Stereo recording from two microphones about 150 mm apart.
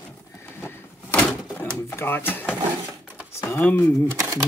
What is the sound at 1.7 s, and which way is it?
Speech, 15° left (ahead or behind).